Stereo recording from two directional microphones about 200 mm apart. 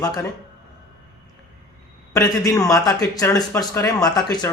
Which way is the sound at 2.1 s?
15° left (ahead or behind).